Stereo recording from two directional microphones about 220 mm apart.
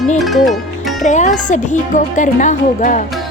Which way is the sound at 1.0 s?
30° left (ahead or behind).